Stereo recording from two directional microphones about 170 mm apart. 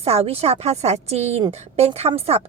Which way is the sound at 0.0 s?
35° right (ahead or behind).